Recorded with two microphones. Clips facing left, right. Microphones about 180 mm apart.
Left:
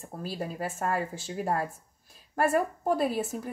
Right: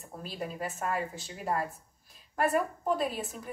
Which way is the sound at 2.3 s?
45° left (ahead or behind).